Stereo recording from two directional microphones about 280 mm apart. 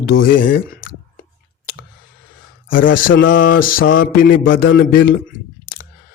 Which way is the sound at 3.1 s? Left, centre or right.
Left.